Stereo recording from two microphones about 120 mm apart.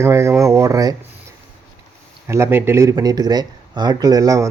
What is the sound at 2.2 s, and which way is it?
Speech, 20° right (ahead or behind).